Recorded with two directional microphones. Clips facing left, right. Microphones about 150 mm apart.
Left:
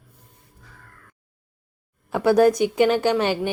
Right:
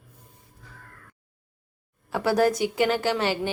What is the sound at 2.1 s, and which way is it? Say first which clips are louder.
Speech: left 5 dB; 20° left (ahead or behind).